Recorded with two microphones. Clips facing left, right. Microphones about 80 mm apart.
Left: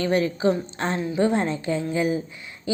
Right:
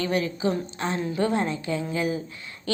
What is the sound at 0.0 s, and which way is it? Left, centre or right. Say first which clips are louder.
A woman's voice: left 4 dB; left.